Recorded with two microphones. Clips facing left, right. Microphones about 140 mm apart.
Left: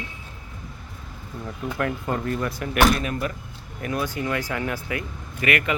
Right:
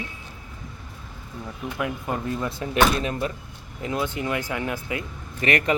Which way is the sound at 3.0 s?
30° right (ahead or behind).